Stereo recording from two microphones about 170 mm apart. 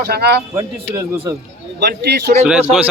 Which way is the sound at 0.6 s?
20° right (ahead or behind).